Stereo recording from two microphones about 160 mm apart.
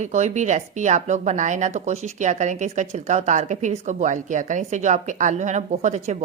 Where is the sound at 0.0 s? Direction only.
45° right (ahead or behind).